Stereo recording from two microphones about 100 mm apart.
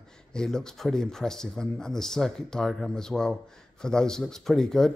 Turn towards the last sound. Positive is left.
turn(degrees=5)  # may be behind; listen again after turning